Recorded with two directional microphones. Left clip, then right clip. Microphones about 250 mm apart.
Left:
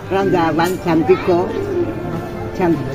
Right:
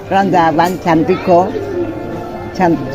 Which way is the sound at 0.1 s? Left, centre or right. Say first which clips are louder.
Right 5 dB; right.